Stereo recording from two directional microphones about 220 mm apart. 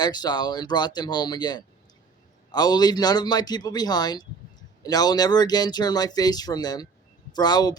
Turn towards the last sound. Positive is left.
turn(degrees=20)  # may be behind; listen again after turning